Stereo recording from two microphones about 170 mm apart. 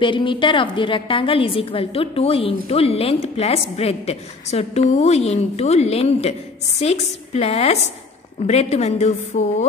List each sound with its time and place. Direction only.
0.0 s a woman's voice: 30° left (ahead or behind)